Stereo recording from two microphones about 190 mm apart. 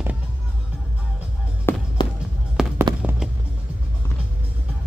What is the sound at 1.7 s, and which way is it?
Music, 10° left (ahead or behind).